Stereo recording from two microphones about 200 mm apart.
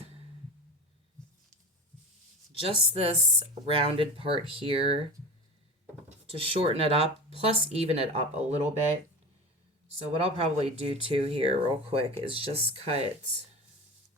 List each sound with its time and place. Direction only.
2.5 s speech: 25° right (ahead or behind)
5.8 s drawer open or close: 30° right (ahead or behind)
7.3 s speech: 30° right (ahead or behind)
10.2 s speech: 30° right (ahead or behind)